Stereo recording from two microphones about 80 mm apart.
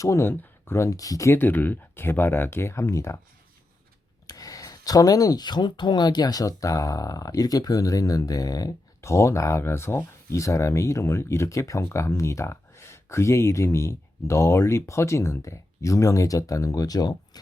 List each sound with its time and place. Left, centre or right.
0.0 s speech: left
0.9 s speech: left
1.3 s speech: left
4.3 s speech: left